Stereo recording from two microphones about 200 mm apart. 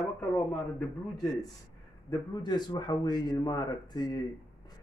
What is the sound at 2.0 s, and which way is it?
A man's voice, 20° left (ahead or behind).